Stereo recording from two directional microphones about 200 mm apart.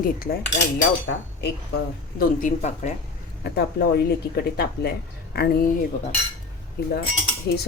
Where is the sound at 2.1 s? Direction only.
40° left (ahead or behind).